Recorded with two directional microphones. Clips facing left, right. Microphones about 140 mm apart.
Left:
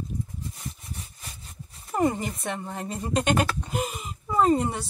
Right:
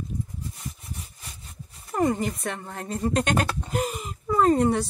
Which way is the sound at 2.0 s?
5° left (ahead or behind).